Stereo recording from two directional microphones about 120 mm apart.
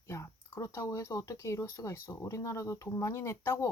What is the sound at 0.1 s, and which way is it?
Speech, 25° left (ahead or behind).